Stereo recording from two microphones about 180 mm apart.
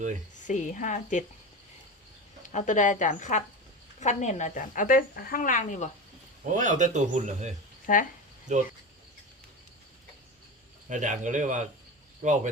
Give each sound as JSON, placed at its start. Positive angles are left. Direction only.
{"t": 0.4, "sound": "speech", "side_deg": 45}
{"t": 2.4, "sound": "speech", "side_deg": 45}
{"t": 6.5, "sound": "speech", "side_deg": -45}
{"t": 7.9, "sound": "speech", "side_deg": 45}
{"t": 8.5, "sound": "speech", "side_deg": -40}
{"t": 10.8, "sound": "speech", "side_deg": -45}